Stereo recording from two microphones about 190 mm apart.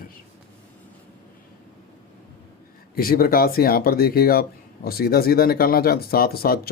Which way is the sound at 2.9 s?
50° left (ahead or behind).